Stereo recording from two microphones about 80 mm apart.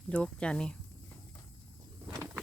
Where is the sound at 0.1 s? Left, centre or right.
Centre.